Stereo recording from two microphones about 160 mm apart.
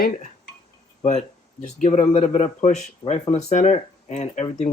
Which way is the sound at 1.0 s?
50° left (ahead or behind).